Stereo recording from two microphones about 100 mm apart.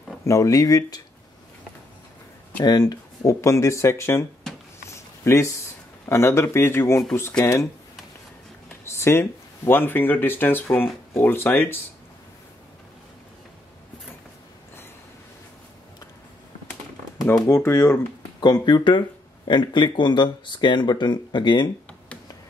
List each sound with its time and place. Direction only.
0.2 s speech: 30° left (ahead or behind)
2.6 s speech: 45° left (ahead or behind)
3.3 s speech: 30° left (ahead or behind)
4.8 s a sound: 30° left (ahead or behind)
6.0 s speech: 25° left (ahead or behind)
8.8 s speech: 25° left (ahead or behind)
17.6 s speech: 25° left (ahead or behind)
18.4 s speech: 45° left (ahead or behind)